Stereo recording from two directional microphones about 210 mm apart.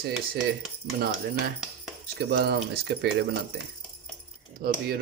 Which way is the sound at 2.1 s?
50° right (ahead or behind).